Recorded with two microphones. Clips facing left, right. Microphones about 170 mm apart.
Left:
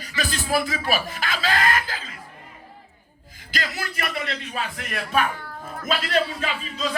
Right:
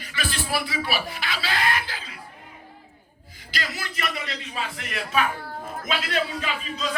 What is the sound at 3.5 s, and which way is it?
Speech, 50° left (ahead or behind).